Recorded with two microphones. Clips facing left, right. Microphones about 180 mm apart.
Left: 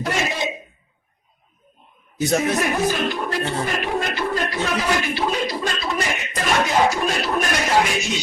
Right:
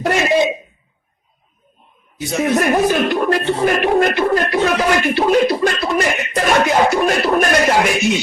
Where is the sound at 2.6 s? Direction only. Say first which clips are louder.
Right 6 dB; 60° right (ahead or behind).